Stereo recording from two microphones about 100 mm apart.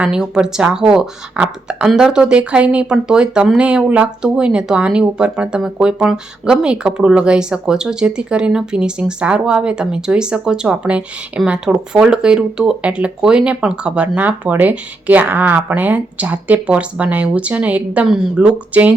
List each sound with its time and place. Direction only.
0.0 s speech: 10° right (ahead or behind)